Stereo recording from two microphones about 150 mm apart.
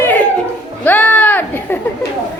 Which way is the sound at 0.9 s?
10° left (ahead or behind).